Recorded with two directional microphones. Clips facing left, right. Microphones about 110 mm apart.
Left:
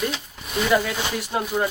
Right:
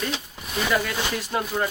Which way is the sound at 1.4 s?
10° left (ahead or behind).